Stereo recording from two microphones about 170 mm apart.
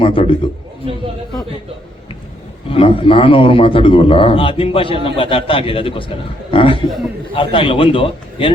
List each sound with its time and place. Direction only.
0.0 s a man's voice: 30° left (ahead or behind)
2.6 s a man's voice: 30° left (ahead or behind)